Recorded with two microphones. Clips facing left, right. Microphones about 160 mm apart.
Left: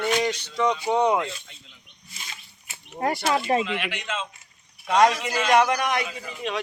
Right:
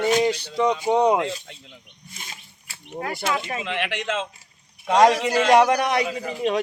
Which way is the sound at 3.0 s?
35° left (ahead or behind).